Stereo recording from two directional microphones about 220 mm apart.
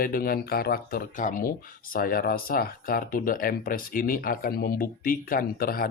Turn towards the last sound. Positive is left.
turn(degrees=40)  # may be behind; listen again after turning